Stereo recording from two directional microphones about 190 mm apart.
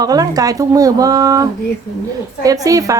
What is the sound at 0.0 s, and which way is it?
A woman's voice, 20° right (ahead or behind).